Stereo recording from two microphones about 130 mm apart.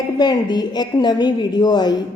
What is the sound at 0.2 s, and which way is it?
A woman's voice, 35° left (ahead or behind).